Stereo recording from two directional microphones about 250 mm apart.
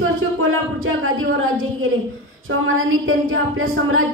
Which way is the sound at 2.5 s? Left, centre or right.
Right.